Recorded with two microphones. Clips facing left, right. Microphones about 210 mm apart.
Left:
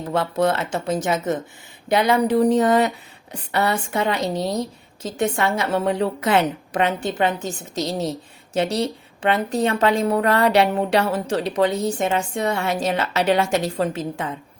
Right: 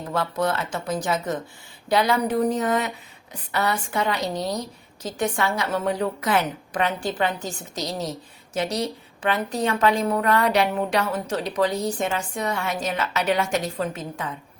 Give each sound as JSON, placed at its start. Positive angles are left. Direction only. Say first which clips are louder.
{"t": 0.1, "sound": "a woman's voice", "louder": "left 4 dB", "side_deg": 25}
{"t": 3.5, "sound": "a woman's voice", "louder": "left 3 dB", "side_deg": 25}